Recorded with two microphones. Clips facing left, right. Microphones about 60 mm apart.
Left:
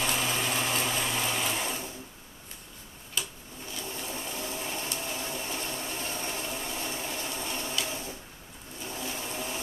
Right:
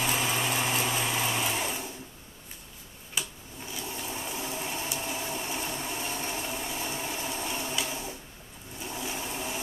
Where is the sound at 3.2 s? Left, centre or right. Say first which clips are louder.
Even; centre.